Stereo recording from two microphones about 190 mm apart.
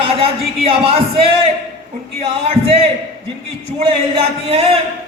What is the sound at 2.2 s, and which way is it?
Speech, 30° right (ahead or behind).